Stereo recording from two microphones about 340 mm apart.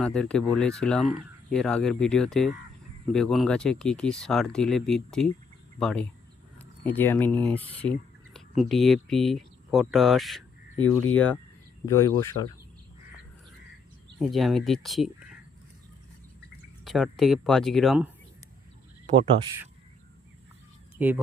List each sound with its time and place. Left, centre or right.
0.0 s speech: centre
7.4 s a sound: centre
8.7 s speech: centre
14.2 s speech: centre
16.8 s speech: centre
19.0 s speech: centre
21.0 s speech: centre